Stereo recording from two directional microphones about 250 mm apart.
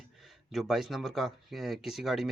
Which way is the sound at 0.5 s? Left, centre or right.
Centre.